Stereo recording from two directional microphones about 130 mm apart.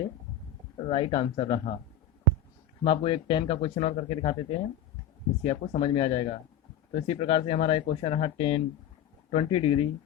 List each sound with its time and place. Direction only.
0.9 s speech: 40° left (ahead or behind)
2.8 s speech: 45° left (ahead or behind)